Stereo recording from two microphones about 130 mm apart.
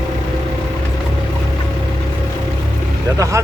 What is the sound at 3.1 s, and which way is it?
Speech, 25° right (ahead or behind).